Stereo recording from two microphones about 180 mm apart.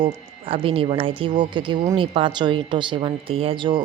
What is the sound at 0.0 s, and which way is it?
Speech, 30° right (ahead or behind).